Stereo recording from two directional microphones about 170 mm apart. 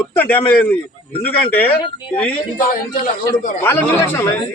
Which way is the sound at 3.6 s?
15° left (ahead or behind).